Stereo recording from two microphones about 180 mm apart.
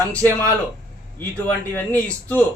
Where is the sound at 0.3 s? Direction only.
10° left (ahead or behind).